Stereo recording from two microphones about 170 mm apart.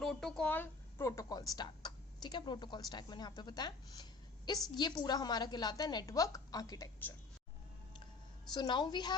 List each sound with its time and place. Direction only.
0.0 s a woman's voice: centre (ahead or behind); by 6.9 s 20° left (ahead or behind)
8.5 s a woman's voice: 25° left (ahead or behind)